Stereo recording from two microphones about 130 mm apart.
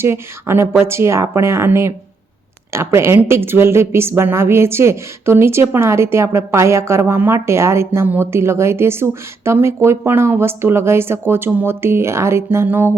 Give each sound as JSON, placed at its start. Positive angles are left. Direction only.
{"t": 0.0, "sound": "a woman's voice", "side_deg": -20}